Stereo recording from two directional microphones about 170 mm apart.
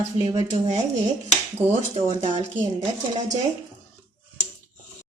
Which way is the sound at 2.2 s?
40° right (ahead or behind).